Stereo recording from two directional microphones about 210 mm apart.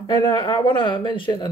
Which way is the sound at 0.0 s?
20° left (ahead or behind).